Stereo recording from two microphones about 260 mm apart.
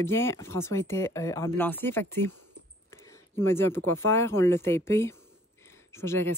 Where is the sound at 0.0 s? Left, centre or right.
Centre.